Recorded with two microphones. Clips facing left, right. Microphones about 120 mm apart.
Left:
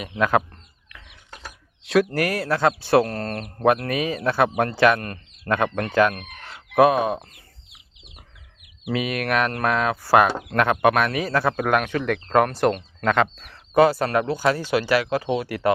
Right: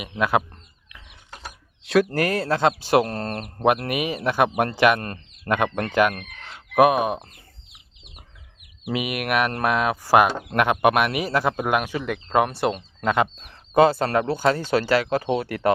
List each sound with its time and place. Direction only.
0.2 s speech: 10° right (ahead or behind)
1.8 s speech: centre (ahead or behind)
2.1 s speech: 30° right (ahead or behind)
4.9 s speech: 30° right (ahead or behind)
5.5 s speech: 20° right (ahead or behind)
8.9 s speech: 15° right (ahead or behind)
13.5 s speech: 25° right (ahead or behind)